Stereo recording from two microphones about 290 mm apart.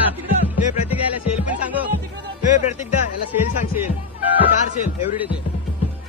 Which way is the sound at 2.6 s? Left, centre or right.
Left.